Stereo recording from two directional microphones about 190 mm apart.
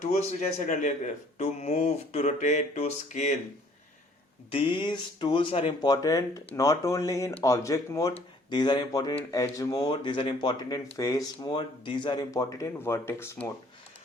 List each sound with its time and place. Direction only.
0.2 s speech: 35° left (ahead or behind)
4.5 s speech: 25° left (ahead or behind)